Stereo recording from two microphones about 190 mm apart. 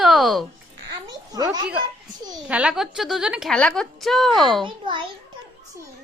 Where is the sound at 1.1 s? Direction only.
20° right (ahead or behind).